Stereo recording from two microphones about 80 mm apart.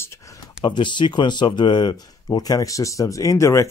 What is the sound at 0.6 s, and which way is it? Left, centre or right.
Speech, left.